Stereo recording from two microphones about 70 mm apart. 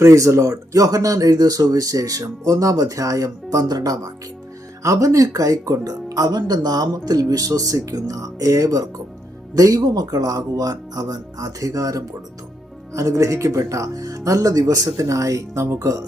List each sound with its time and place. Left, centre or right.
0.0 s speech: right